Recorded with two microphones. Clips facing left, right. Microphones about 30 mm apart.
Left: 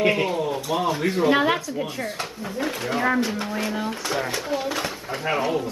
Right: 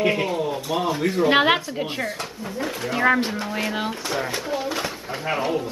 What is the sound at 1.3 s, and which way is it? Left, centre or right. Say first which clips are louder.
Speech: right 4 dB; right.